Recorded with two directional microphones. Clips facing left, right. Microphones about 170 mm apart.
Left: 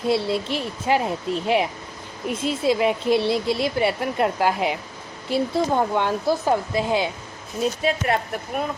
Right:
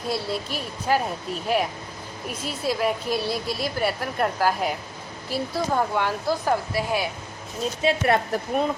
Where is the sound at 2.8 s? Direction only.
25° left (ahead or behind).